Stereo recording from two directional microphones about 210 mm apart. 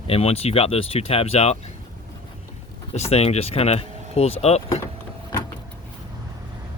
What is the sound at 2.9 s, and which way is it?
Speech, 30° left (ahead or behind).